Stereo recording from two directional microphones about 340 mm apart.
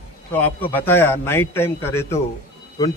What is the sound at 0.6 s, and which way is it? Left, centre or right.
A man's voice, centre.